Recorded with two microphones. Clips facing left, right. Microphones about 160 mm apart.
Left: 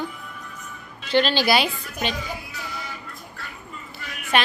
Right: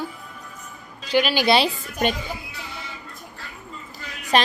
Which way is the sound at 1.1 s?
10° right (ahead or behind).